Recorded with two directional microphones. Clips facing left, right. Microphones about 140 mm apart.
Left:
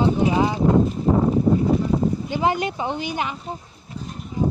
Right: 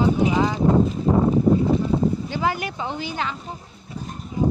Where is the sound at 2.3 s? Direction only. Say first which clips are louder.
Left 3 dB; 20° left (ahead or behind).